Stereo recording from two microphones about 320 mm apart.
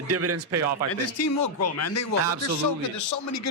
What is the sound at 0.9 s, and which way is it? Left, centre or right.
Speech, left.